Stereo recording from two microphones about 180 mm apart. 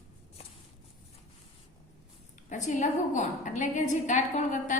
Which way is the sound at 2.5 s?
45° left (ahead or behind).